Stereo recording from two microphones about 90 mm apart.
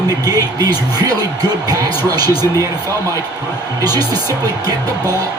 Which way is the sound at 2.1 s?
45° right (ahead or behind).